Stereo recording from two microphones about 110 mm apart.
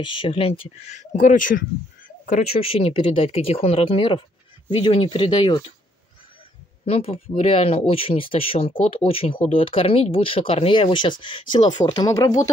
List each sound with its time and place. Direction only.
0.0 s speech: 50° left (ahead or behind)
2.2 s speech: 80° left; by 5.5 s 50° left (ahead or behind)
6.9 s speech: 65° left (ahead or behind); by 12.4 s 30° left (ahead or behind)